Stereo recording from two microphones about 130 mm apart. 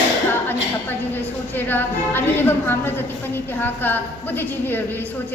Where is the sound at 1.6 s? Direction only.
15° left (ahead or behind).